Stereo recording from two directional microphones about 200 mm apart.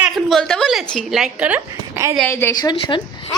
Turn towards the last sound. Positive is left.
turn(degrees=25)  # may be behind; listen again after turning